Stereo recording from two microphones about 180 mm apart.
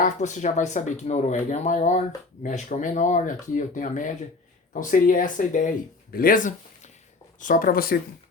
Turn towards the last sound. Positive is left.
turn(degrees=55)  # may be behind; listen again after turning